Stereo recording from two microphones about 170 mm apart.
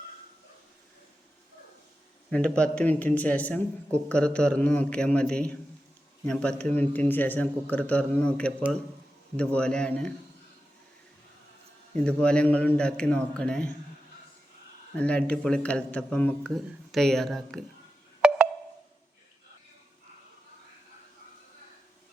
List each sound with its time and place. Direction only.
2.3 s a man's voice: 5° left (ahead or behind)
12.0 s a man's voice: 5° left (ahead or behind)
14.9 s a man's voice: 5° left (ahead or behind)